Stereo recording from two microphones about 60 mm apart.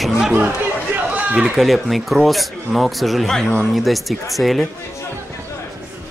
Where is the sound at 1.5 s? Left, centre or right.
Centre.